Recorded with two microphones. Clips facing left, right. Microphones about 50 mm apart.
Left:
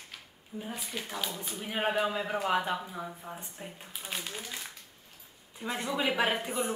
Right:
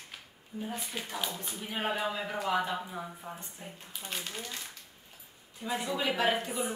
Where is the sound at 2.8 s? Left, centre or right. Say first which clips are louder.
Even; centre.